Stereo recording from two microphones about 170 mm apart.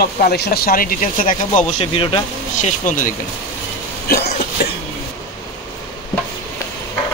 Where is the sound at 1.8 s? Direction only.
30° left (ahead or behind).